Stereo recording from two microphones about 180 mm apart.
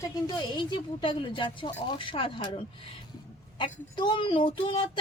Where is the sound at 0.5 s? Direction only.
25° left (ahead or behind).